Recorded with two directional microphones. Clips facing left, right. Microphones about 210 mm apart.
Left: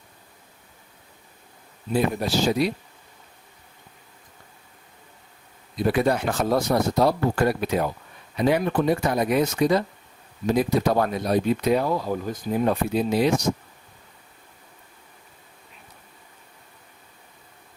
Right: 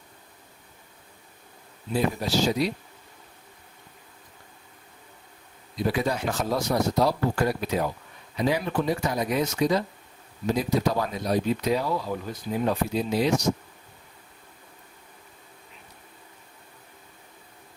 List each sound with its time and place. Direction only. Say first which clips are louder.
1.9 s speech: left 2 dB; 55° left (ahead or behind)
5.8 s speech: left 4 dB; 55° left (ahead or behind)